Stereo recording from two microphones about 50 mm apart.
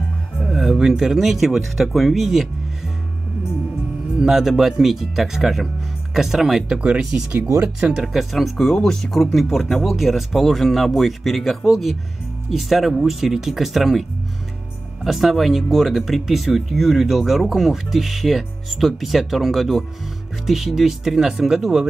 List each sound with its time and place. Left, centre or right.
0.4 s speech: centre
4.2 s speech: centre
6.7 s speech: centre
8.1 s speech: centre
15.0 s speech: centre